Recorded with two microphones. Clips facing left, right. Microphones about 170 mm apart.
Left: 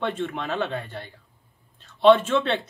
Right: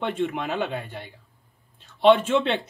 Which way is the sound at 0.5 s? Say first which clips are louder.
Even; 5° right (ahead or behind).